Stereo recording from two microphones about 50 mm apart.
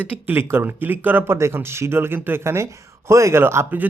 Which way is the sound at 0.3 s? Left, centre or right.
Right.